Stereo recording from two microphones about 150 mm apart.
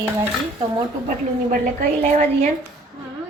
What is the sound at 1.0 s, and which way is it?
A woman's voice, 60° right (ahead or behind).